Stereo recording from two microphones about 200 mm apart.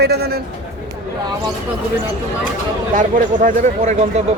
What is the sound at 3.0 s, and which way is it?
Speech, 40° right (ahead or behind).